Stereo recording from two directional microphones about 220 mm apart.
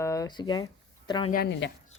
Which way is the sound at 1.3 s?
45° left (ahead or behind).